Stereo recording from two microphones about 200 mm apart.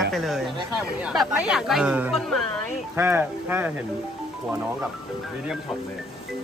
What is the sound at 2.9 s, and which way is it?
Speech, 10° right (ahead or behind).